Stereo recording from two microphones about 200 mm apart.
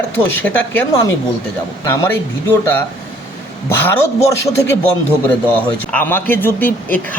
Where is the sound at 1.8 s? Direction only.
15° left (ahead or behind).